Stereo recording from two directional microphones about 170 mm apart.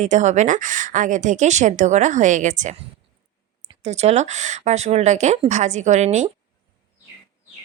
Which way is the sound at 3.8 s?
40° right (ahead or behind).